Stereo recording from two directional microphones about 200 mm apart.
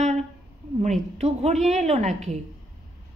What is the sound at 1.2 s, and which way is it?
Speech, 30° right (ahead or behind).